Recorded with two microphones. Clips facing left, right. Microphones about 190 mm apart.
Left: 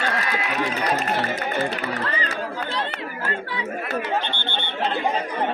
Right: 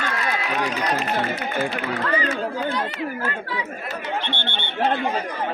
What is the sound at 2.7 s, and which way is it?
Speech, 30° left (ahead or behind).